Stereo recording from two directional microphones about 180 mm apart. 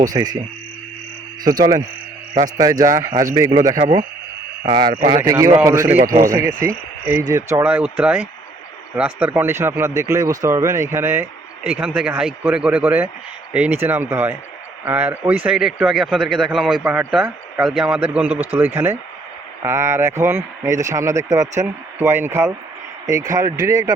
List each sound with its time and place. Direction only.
0.1 s a man's voice: 20° right (ahead or behind)
1.5 s a man's voice: 20° right (ahead or behind)
6.0 s speech: 50° right (ahead or behind)
6.2 s speech: 15° right (ahead or behind)